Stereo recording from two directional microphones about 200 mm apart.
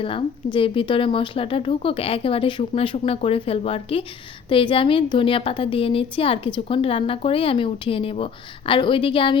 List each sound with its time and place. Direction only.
0.0 s a woman's voice: 25° left (ahead or behind)